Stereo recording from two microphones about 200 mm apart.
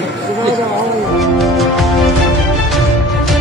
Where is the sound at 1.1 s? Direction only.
Centre (ahead or behind).